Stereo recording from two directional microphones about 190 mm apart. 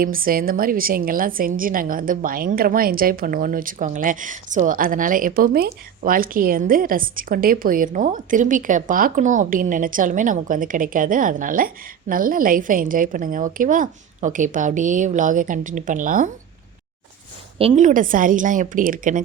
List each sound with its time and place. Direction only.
0.0 s a woman's voice: 50° right (ahead or behind)
17.6 s a woman's voice: 35° right (ahead or behind)